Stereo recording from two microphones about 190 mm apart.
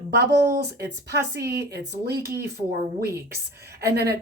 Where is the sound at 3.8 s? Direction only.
55° right (ahead or behind).